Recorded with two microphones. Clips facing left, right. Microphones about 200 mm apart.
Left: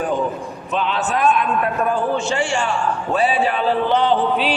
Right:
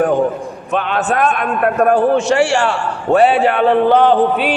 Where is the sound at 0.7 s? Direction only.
55° right (ahead or behind).